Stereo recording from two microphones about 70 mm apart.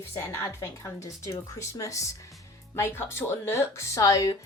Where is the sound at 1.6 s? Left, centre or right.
Left.